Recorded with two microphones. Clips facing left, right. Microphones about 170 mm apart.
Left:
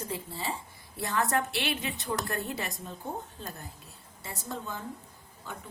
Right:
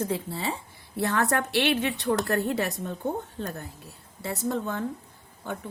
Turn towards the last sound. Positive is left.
turn(degrees=-60)  # may be behind; listen again after turning